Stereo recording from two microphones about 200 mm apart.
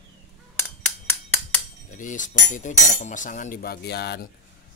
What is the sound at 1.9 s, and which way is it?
Cutlery, 40° left (ahead or behind).